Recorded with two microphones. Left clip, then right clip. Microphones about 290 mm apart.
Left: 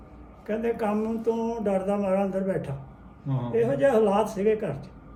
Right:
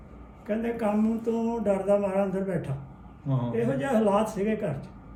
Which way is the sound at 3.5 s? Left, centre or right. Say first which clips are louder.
Left 6 dB; centre.